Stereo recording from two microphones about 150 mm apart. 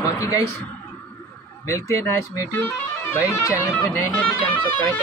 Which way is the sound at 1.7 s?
20° left (ahead or behind).